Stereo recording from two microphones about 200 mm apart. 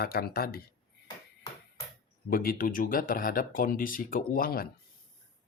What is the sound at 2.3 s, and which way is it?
Speech, 45° left (ahead or behind).